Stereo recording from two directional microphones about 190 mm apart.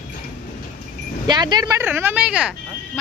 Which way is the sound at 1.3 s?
20° right (ahead or behind).